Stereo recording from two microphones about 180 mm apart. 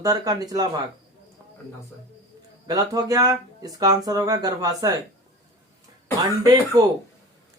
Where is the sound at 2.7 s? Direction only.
20° right (ahead or behind).